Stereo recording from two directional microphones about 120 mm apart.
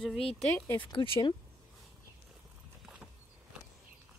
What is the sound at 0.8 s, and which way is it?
Speech, 40° left (ahead or behind).